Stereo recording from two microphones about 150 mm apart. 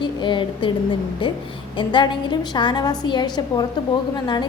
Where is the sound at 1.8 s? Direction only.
30° left (ahead or behind).